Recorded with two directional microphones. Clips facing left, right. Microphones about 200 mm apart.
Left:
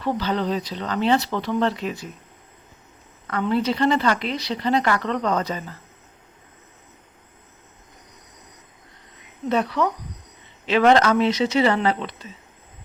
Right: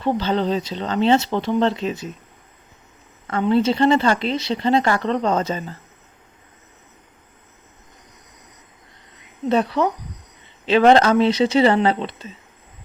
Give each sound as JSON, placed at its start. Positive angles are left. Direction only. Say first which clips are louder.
{"t": 0.0, "sound": "speech", "louder": "right 3 dB", "side_deg": -25}
{"t": 3.2, "sound": "speech", "louder": "right 4 dB", "side_deg": -25}
{"t": 9.5, "sound": "speech", "louder": "right 3 dB", "side_deg": -30}